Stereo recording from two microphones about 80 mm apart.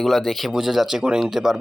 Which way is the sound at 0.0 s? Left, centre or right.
Centre.